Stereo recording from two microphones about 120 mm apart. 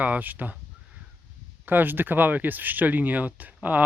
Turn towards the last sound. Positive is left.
turn(degrees=-15)  # may be behind; listen again after turning